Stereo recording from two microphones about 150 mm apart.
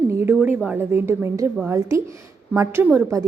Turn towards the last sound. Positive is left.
turn(degrees=-20)  # may be behind; listen again after turning